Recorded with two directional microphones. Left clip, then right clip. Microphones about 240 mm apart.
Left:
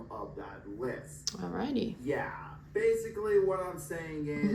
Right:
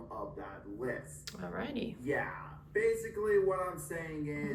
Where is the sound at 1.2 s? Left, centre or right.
Centre.